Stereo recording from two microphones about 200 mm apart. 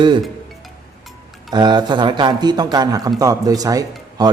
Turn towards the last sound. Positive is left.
turn(degrees=-20)  # may be behind; listen again after turning